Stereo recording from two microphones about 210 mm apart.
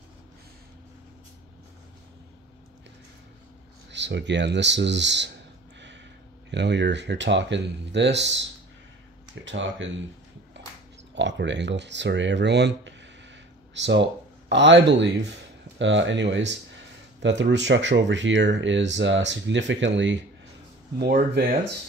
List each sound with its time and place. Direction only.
3.9 s speech: 55° right (ahead or behind)
6.5 s speech: 55° right (ahead or behind)
11.1 s speech: 60° right (ahead or behind)
21.0 s speech: 45° right (ahead or behind)